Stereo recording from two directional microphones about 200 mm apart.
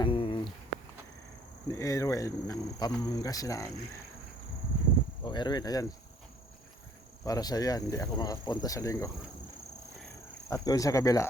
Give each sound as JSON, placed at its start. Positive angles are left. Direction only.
{"t": 0.0, "sound": "a sound", "side_deg": 25}
{"t": 1.6, "sound": "speech", "side_deg": 15}
{"t": 5.2, "sound": "speech", "side_deg": 20}
{"t": 7.3, "sound": "speech", "side_deg": 20}
{"t": 10.5, "sound": "speech", "side_deg": 15}